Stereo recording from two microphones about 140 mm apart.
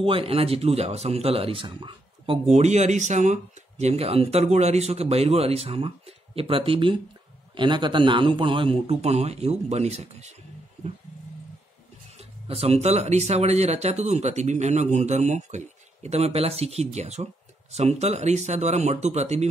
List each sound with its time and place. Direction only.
0.0 s speech: 40° right (ahead or behind)
12.2 s speech: 45° right (ahead or behind)